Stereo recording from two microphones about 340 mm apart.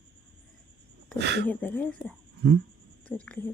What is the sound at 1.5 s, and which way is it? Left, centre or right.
Speech, centre.